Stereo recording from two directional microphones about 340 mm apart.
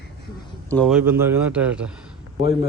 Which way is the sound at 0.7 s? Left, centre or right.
Centre.